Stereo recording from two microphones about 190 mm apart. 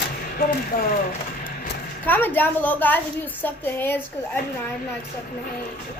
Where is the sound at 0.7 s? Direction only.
55° left (ahead or behind).